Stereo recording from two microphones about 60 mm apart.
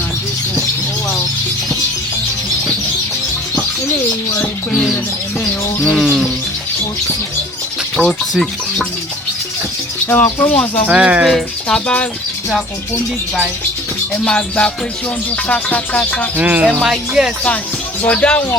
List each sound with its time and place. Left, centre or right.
6.0 s bird: centre
7.9 s speech: centre
10.1 s speech: left
10.8 s speech: centre
11.7 s music: centre
14.3 s music: centre
16.4 s speech: right
16.8 s speech: centre
18.1 s music: left